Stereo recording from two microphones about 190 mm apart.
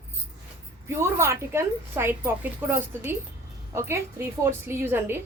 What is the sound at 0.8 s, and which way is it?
A woman's voice, 15° right (ahead or behind).